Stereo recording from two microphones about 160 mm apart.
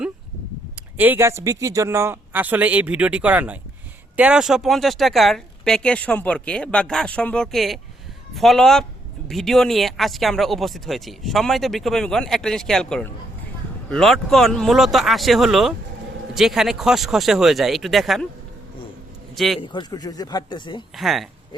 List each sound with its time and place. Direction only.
0.9 s speech: 10° right (ahead or behind)
19.5 s a man's voice: 30° left (ahead or behind)
20.9 s speech: centre (ahead or behind)